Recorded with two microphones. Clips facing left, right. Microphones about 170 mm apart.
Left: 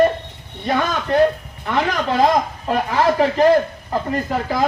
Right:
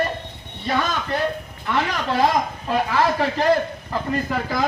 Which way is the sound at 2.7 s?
45° left (ahead or behind).